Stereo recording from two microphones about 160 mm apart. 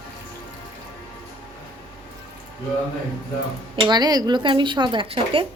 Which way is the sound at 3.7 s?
30° right (ahead or behind).